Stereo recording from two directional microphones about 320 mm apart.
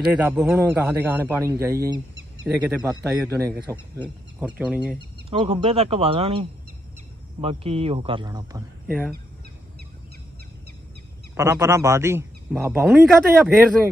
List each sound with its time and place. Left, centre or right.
0.1 s a man's voice: centre
5.3 s a man's voice: centre
11.3 s a man's voice: centre